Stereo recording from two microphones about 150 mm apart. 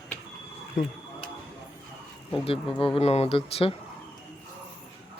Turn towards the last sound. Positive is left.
turn(degrees=40)  # may be behind; listen again after turning